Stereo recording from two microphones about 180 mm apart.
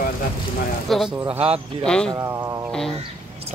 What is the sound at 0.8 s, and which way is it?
Speech, centre (ahead or behind).